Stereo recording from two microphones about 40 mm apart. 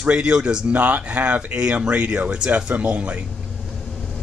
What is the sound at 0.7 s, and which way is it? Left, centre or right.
Speech, right.